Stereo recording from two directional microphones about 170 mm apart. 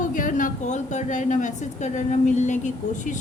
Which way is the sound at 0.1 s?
50° left (ahead or behind).